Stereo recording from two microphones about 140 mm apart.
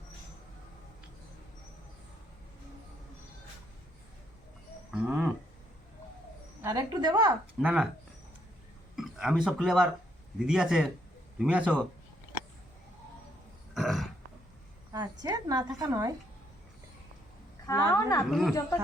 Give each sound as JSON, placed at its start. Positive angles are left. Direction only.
{"t": 4.9, "sound": "a sound", "side_deg": -5}
{"t": 6.7, "sound": "a woman's voice", "side_deg": -30}
{"t": 7.3, "sound": "speech", "side_deg": -10}
{"t": 9.0, "sound": "a man's voice", "side_deg": -5}
{"t": 13.7, "sound": "roaring cats", "side_deg": 0}
{"t": 15.2, "sound": "a woman's voice", "side_deg": -25}
{"t": 17.7, "sound": "speech", "side_deg": 25}
{"t": 18.3, "sound": "a man's voice", "side_deg": 0}